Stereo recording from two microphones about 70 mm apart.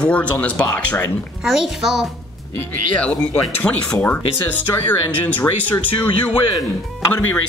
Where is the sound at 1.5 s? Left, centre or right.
Centre.